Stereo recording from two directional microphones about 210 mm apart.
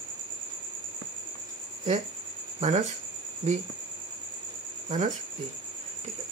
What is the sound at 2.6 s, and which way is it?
Speech, 35° right (ahead or behind).